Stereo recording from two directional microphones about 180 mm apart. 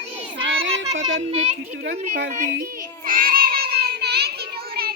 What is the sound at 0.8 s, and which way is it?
Speech, 90° right.